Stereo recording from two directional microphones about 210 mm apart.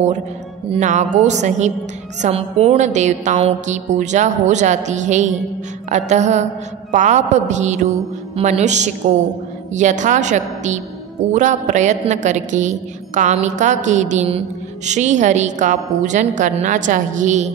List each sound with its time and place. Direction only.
0.7 s a woman's voice: 35° right (ahead or behind)